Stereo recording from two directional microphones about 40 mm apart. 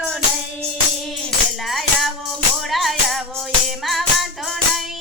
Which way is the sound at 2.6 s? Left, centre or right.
Centre.